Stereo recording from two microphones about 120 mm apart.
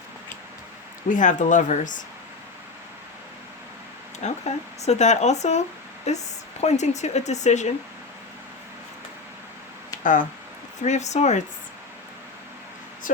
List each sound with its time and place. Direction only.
1.1 s speech: 90° left
4.2 s speech: 70° left (ahead or behind)
10.0 s speech: 90° left
10.8 s speech: 75° left (ahead or behind)